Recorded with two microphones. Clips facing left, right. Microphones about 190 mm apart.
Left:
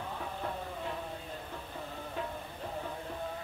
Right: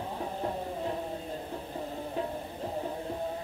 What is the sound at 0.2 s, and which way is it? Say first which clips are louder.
Music: right 7 dB; 30° right (ahead or behind).